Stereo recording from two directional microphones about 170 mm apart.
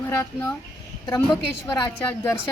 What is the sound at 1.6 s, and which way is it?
Speech, 15° left (ahead or behind).